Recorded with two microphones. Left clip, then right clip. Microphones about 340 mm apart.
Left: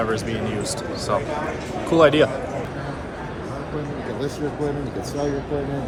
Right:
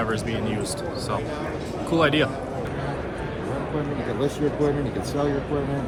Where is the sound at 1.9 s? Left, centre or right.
Centre.